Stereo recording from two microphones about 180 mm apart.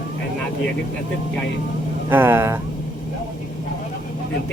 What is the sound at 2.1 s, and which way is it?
Speech, 15° right (ahead or behind).